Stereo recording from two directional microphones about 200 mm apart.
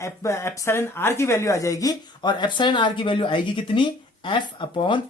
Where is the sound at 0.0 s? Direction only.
15° left (ahead or behind).